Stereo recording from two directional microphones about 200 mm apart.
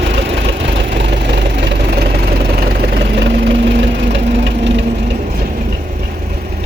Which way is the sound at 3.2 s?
65° right (ahead or behind).